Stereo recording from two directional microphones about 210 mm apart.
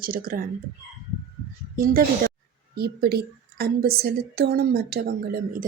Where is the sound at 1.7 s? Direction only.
45° right (ahead or behind).